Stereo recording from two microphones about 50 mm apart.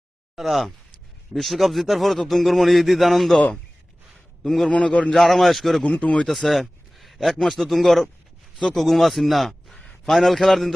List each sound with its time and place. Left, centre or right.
0.3 s speech: centre
4.4 s speech: centre
4.7 s a man's voice: left
5.1 s speech: centre
5.8 s a man's voice: left
6.2 s a man's voice: centre